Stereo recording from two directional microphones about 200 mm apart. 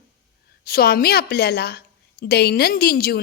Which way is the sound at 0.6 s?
50° left (ahead or behind).